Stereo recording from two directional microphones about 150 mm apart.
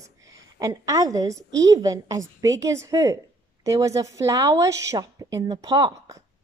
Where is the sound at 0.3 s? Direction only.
20° right (ahead or behind).